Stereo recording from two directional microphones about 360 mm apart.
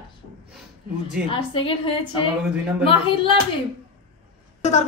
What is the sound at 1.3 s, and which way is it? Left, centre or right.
Speech, centre.